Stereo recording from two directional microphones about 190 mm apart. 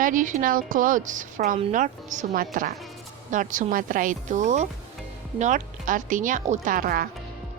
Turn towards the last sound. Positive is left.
turn(degrees=-50)  # may be behind; listen again after turning